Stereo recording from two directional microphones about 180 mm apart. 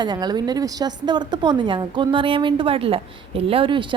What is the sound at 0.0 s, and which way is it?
A woman's voice, 25° right (ahead or behind).